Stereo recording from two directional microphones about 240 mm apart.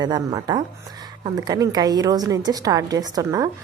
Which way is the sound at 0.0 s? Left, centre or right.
Centre.